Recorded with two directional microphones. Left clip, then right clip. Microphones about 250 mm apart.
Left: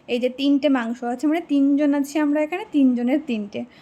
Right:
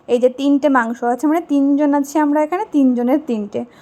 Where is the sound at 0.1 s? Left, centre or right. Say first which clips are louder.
Right 7 dB; centre.